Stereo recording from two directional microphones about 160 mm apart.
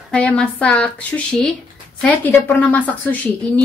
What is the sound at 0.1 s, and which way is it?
A woman's voice, 5° left (ahead or behind).